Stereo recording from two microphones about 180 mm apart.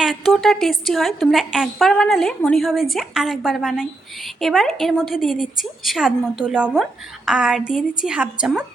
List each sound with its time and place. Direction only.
0.0 s a woman's voice: centre (ahead or behind)